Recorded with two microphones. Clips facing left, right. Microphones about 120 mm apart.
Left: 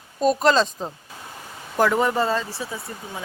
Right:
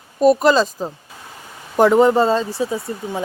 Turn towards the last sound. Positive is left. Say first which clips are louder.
# right 9 dB
turn(degrees=-25)  # may be behind; listen again after turning